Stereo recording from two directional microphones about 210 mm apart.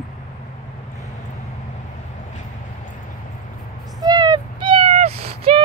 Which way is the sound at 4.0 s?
20° right (ahead or behind).